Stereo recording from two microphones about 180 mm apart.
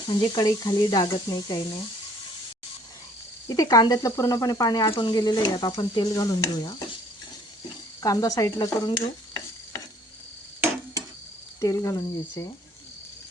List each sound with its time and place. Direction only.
0.1 s speech: 20° left (ahead or behind)
3.5 s speech: 20° left (ahead or behind)
8.0 s speech: 20° left (ahead or behind)
11.6 s speech: 15° left (ahead or behind)